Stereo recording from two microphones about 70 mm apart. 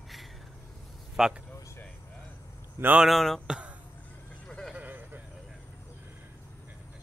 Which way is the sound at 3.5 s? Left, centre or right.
Centre.